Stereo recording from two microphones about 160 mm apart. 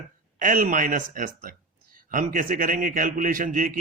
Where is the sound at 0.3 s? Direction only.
60° right (ahead or behind).